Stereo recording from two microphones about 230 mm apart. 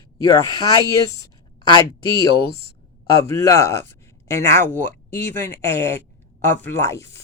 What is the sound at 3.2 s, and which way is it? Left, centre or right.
Speech, centre.